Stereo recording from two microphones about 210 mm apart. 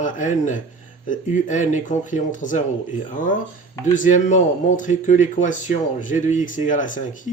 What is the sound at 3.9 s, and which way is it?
Speech, 35° left (ahead or behind).